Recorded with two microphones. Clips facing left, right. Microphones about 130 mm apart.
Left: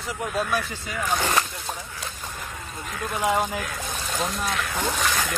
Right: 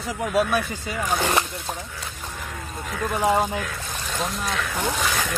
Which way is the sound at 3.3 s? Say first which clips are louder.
Right 1 dB; 25° right (ahead or behind).